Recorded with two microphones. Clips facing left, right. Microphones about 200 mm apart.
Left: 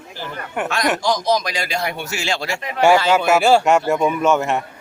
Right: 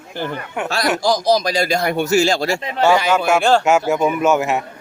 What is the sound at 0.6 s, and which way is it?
Speech, 35° right (ahead or behind).